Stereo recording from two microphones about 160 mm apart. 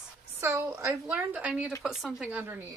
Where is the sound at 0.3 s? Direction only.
15° right (ahead or behind).